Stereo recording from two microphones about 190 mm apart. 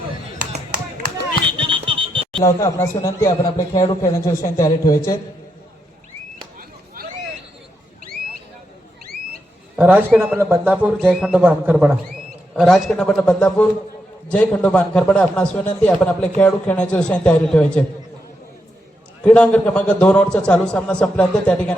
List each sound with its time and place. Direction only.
0.3 s a sound: 45° right (ahead or behind)
1.5 s a sound: 25° right (ahead or behind)
2.4 s a man's voice: 15° left (ahead or behind)
7.0 s hubbub: 50° right (ahead or behind)
9.7 s a man's voice: 10° right (ahead or behind)
19.2 s a man's voice: 5° left (ahead or behind)